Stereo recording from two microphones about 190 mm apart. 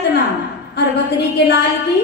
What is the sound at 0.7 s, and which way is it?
Speech, 60° left (ahead or behind).